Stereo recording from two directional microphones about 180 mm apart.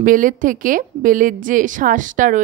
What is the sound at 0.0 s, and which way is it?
A woman's voice, 50° right (ahead or behind).